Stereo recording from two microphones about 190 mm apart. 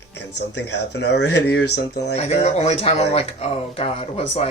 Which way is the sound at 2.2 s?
35° left (ahead or behind).